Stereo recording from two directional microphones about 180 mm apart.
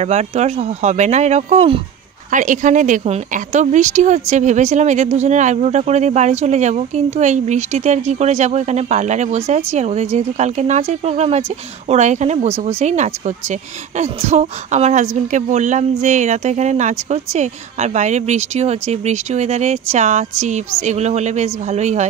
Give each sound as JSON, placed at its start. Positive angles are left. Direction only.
{"t": 0.0, "sound": "speech", "side_deg": -40}